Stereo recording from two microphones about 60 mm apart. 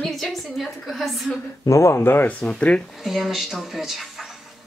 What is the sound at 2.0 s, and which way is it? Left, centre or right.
Speech, left.